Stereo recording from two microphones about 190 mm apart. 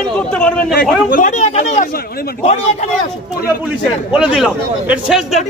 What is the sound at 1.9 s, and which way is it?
Speech, 55° left (ahead or behind).